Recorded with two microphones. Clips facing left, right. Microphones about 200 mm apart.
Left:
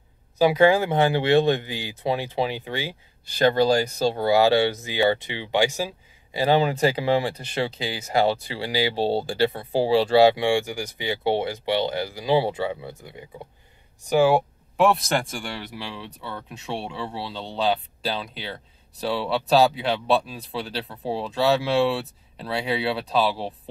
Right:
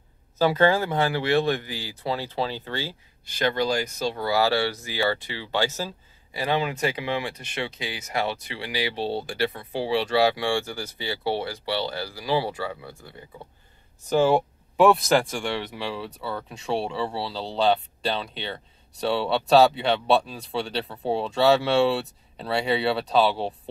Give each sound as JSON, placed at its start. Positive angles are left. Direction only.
{"t": 0.4, "sound": "speech", "side_deg": 15}
{"t": 3.3, "sound": "speech", "side_deg": 35}
{"t": 6.3, "sound": "speech", "side_deg": 30}